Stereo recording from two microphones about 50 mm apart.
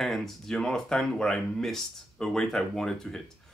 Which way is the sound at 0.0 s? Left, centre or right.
Centre.